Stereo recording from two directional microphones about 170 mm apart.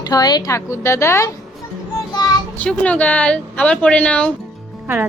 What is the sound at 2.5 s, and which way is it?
Speech, 5° left (ahead or behind).